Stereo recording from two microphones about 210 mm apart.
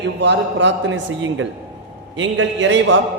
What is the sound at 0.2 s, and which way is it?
A man's voice, 60° right (ahead or behind).